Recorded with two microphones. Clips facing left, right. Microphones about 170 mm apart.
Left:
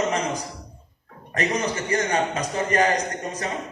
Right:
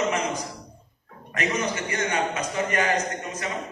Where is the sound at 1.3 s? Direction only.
35° left (ahead or behind).